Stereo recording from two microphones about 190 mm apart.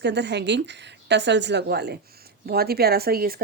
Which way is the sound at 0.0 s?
65° right (ahead or behind).